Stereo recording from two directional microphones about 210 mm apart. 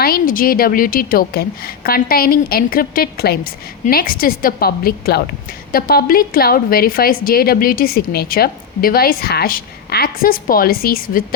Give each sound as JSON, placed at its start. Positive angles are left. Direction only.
{"t": 0.0, "sound": "a woman's voice", "side_deg": 45}